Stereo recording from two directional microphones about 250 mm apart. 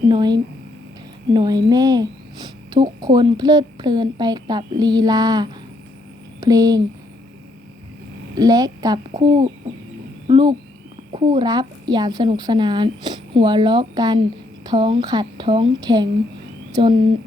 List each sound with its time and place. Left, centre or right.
0.1 s speech: centre
8.4 s speech: centre
10.2 s speech: centre